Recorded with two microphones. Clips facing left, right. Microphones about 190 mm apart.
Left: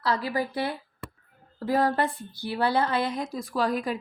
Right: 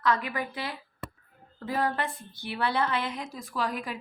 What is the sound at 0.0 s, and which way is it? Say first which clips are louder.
A woman's voice: left 1 dB; 35° left (ahead or behind).